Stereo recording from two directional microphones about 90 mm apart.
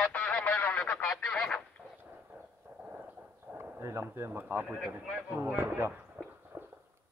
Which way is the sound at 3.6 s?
30° right (ahead or behind).